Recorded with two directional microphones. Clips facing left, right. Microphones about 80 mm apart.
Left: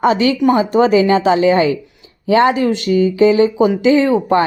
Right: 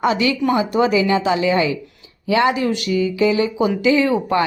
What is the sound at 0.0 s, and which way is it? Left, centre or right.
Speech, left.